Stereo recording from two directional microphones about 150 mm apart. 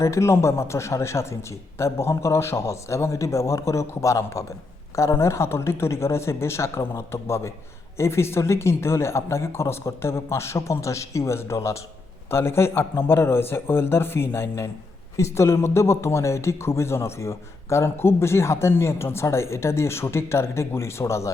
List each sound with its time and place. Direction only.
0.0 s a man's voice: 20° left (ahead or behind)